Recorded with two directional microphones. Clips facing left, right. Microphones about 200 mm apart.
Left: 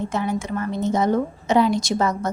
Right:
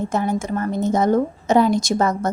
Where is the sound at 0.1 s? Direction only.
45° right (ahead or behind).